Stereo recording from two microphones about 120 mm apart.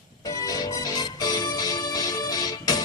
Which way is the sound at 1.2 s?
30° left (ahead or behind).